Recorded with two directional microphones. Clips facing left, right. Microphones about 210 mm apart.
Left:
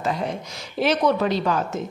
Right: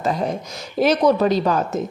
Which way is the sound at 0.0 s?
40° right (ahead or behind).